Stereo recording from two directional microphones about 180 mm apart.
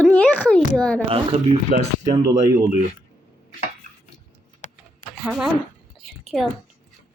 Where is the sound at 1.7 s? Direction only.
50° right (ahead or behind).